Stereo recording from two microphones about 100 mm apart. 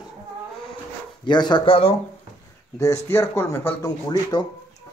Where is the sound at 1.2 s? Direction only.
50° left (ahead or behind).